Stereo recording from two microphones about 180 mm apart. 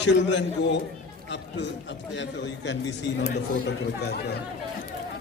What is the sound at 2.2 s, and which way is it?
A man's voice, 80° left.